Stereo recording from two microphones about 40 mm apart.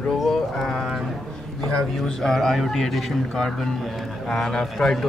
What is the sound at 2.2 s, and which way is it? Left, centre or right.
A man's voice, centre.